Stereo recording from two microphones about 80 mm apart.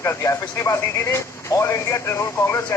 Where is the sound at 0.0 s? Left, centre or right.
Left.